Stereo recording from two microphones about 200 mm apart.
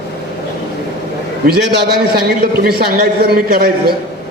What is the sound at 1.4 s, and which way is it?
A man's voice, 55° right (ahead or behind).